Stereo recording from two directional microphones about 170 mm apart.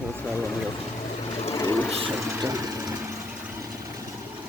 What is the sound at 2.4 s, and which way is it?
Engine, 20° right (ahead or behind).